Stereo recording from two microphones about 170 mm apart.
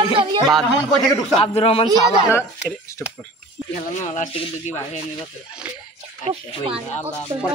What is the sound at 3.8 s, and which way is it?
Speech, 45° left (ahead or behind).